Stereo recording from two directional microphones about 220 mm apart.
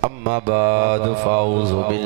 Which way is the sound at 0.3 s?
10° right (ahead or behind).